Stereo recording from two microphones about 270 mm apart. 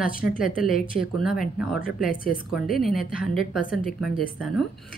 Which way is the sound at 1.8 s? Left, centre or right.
Left.